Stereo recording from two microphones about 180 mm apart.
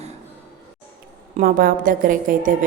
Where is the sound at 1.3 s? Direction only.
50° right (ahead or behind).